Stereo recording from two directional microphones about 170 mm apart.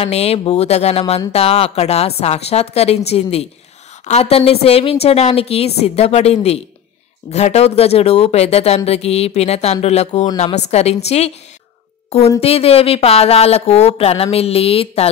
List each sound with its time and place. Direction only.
0.0 s speech: 35° left (ahead or behind)
12.4 s speech: 35° left (ahead or behind)